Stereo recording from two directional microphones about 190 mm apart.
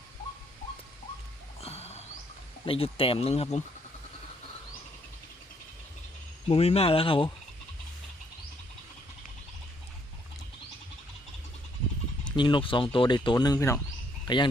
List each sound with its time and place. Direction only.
1.6 s a sound: 35° left (ahead or behind)
2.6 s speech: 30° left (ahead or behind)
6.5 s speech: 30° left (ahead or behind)
12.4 s speech: 25° left (ahead or behind)